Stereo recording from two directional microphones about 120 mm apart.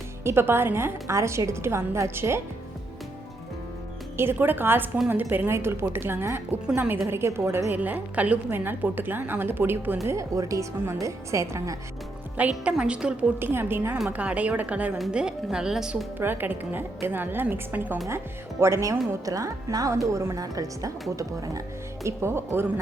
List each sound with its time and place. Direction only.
0.3 s a woman's voice: 20° right (ahead or behind)
4.2 s a woman's voice: 15° right (ahead or behind)
10.0 s a woman's voice: 25° right (ahead or behind)
12.4 s a woman's voice: 10° right (ahead or behind)
13.4 s a woman's voice: 20° right (ahead or behind)
16.1 s a woman's voice: 15° right (ahead or behind)